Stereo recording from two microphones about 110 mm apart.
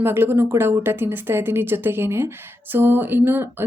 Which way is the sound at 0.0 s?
20° right (ahead or behind).